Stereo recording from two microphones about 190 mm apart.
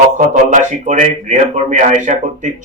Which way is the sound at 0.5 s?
40° right (ahead or behind).